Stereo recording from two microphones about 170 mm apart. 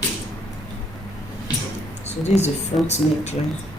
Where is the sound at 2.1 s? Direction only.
40° left (ahead or behind).